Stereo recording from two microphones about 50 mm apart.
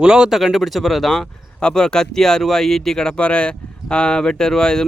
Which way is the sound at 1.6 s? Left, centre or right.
Centre.